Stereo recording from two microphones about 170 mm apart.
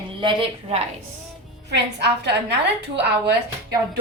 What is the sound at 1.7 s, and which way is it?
Speech, 85° right.